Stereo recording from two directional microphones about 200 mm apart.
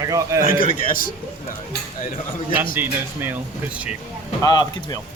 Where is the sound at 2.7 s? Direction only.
10° right (ahead or behind).